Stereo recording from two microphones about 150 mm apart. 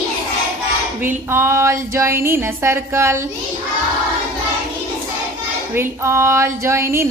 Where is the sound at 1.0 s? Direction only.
15° right (ahead or behind).